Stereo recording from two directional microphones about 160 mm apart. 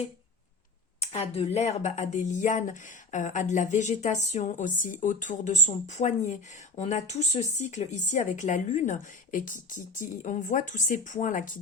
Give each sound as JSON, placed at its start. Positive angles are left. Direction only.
{"t": 1.0, "sound": "speech", "side_deg": 40}